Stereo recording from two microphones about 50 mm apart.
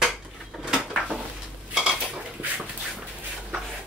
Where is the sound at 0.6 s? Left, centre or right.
Centre.